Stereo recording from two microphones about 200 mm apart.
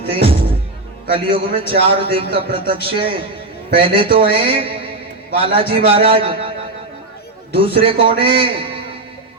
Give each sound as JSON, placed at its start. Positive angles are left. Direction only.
{"t": 0.1, "sound": "a man's voice", "side_deg": -30}
{"t": 7.5, "sound": "a man's voice", "side_deg": -30}